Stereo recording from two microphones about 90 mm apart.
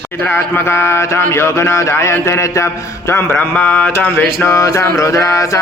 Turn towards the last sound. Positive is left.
turn(degrees=35)  # may be behind; listen again after turning